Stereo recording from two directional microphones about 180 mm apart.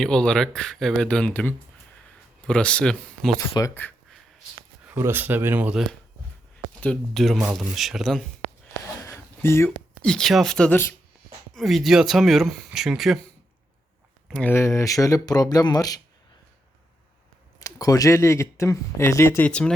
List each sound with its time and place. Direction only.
0.0 s speech: 5° left (ahead or behind)
3.3 s speech: 20° left (ahead or behind)
4.9 s speech: 10° right (ahead or behind)
9.0 s speech: 15° left (ahead or behind); by 13.1 s centre (ahead or behind)
14.3 s speech: 5° left (ahead or behind)
17.6 s speech: 20° left (ahead or behind)